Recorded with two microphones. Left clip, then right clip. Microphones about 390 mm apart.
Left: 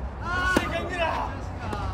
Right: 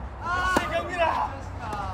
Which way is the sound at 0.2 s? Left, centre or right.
Centre.